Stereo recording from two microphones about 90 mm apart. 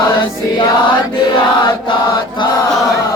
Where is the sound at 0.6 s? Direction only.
65° left (ahead or behind).